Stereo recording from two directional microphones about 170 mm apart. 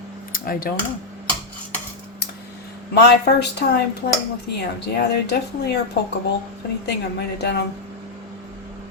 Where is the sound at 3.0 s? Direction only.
80° left.